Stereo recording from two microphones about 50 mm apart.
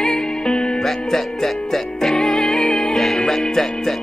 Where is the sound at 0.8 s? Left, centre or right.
Centre.